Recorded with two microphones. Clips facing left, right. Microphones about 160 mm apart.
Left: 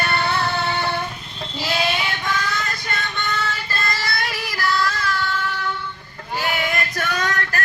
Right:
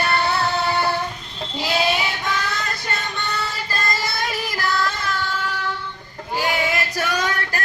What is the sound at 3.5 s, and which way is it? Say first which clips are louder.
Child singing: right 1 dB; 15° right (ahead or behind).